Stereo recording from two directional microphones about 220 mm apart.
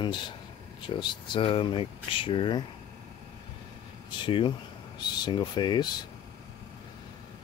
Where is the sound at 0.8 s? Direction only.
20° left (ahead or behind).